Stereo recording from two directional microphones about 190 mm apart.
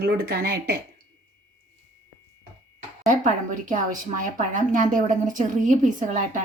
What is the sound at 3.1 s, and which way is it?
Speech, 40° right (ahead or behind).